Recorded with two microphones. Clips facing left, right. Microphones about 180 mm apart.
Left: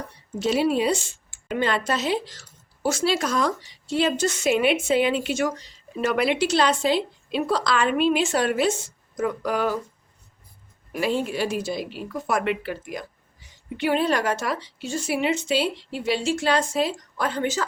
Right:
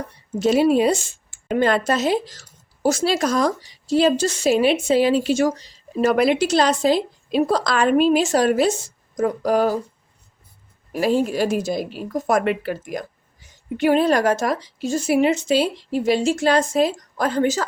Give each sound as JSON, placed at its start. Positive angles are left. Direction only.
{"t": 0.3, "sound": "a woman's voice", "side_deg": -45}
{"t": 10.9, "sound": "speech", "side_deg": -40}